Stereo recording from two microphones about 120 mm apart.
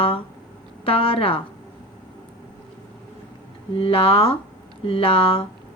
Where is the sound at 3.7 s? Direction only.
50° left (ahead or behind).